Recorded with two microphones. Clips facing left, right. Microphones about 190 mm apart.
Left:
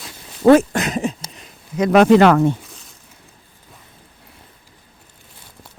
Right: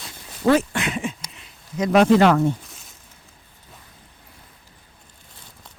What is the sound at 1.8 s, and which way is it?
Speech, 70° left (ahead or behind).